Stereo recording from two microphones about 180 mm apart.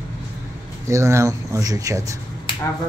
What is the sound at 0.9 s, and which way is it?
Speech, 15° right (ahead or behind).